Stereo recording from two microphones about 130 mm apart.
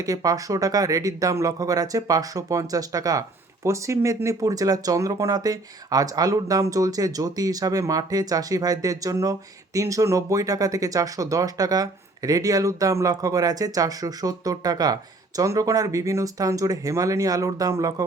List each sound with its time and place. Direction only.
0.0 s speech: 25° right (ahead or behind)